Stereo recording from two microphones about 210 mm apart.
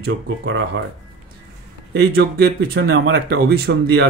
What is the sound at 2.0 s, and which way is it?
Speech, 50° right (ahead or behind).